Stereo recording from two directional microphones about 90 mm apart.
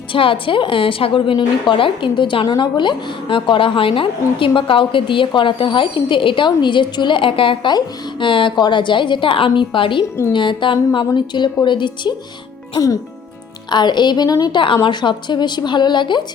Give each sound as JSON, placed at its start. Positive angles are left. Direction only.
{"t": 0.1, "sound": "a woman's voice", "side_deg": 75}
{"t": 7.7, "sound": "a woman's voice", "side_deg": 60}
{"t": 12.7, "sound": "speech", "side_deg": 40}
{"t": 13.7, "sound": "a woman's voice", "side_deg": 55}
{"t": 14.6, "sound": "a woman's voice", "side_deg": 65}